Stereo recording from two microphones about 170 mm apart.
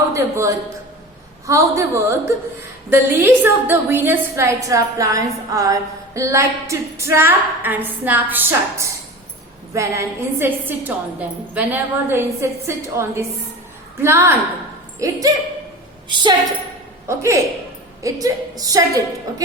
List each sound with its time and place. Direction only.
0.1 s a man's voice: 20° right (ahead or behind)
17.1 s a woman's voice: 15° right (ahead or behind)